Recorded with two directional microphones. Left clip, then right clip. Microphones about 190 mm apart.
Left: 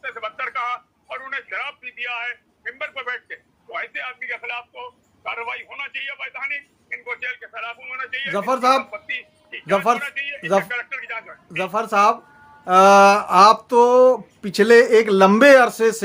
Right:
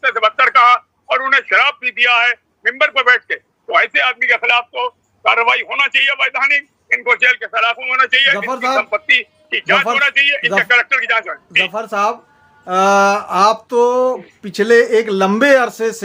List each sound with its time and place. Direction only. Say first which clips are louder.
0.0 s a man's voice: right 15 dB; 50° right (ahead or behind)
8.3 s speech: right 2 dB; 10° left (ahead or behind)
8.8 s a man's voice: right 15 dB; 50° right (ahead or behind)
11.7 s speech: even; 10° left (ahead or behind)